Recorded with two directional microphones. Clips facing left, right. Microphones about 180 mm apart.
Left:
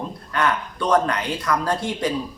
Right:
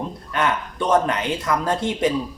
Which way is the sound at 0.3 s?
20° right (ahead or behind).